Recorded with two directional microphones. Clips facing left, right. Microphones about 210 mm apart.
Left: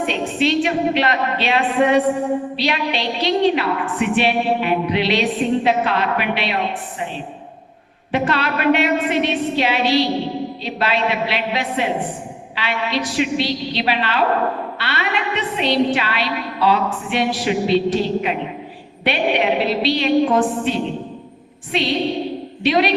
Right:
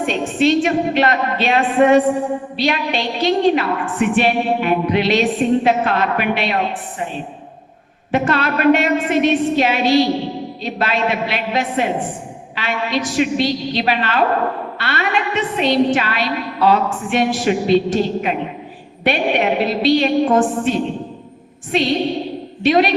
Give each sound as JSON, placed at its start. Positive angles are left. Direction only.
{"t": 0.0, "sound": "a woman's voice", "side_deg": -45}
{"t": 8.1, "sound": "a woman's voice", "side_deg": -45}